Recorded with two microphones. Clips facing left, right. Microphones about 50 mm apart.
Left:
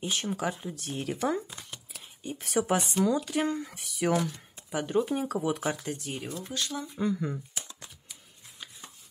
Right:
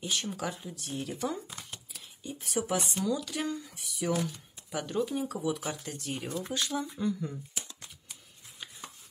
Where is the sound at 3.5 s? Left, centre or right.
Left.